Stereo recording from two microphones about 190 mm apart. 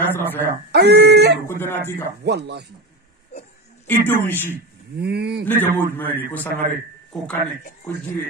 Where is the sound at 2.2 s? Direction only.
60° right (ahead or behind).